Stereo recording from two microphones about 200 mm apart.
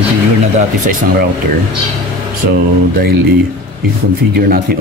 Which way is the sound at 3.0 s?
50° right (ahead or behind).